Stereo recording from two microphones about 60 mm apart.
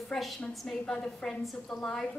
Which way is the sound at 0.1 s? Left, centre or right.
Centre.